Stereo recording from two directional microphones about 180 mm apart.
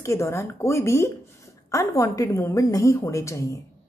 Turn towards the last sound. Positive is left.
turn(degrees=15)  # may be behind; listen again after turning